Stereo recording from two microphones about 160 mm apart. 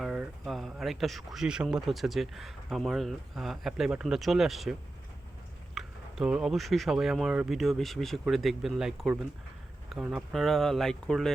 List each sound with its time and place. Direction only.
0.0 s speech: centre (ahead or behind)